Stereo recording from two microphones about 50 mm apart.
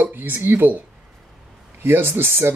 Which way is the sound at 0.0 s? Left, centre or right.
Right.